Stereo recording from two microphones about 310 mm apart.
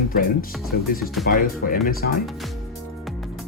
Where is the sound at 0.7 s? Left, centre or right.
Left.